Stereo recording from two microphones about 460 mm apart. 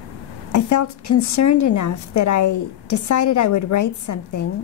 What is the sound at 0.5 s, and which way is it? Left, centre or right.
A woman's voice, left.